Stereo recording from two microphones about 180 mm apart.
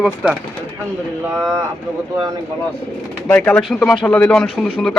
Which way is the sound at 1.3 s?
15° right (ahead or behind).